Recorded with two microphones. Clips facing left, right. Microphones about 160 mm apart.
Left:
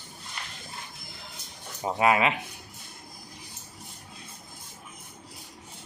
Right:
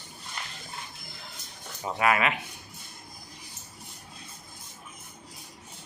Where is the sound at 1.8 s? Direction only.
25° left (ahead or behind).